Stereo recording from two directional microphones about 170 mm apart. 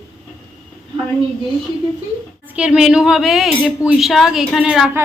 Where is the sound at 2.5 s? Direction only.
5° right (ahead or behind).